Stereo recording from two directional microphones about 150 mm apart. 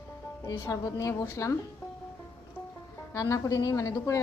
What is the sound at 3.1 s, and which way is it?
A woman's voice, 20° left (ahead or behind).